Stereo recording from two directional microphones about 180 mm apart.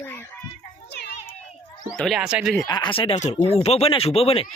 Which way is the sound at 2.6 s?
25° left (ahead or behind).